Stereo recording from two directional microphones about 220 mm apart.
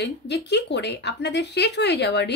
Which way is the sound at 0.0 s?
50° left (ahead or behind).